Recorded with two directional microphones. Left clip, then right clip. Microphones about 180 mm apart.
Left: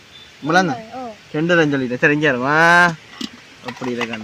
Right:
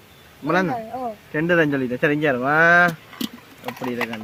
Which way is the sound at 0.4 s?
50° left (ahead or behind).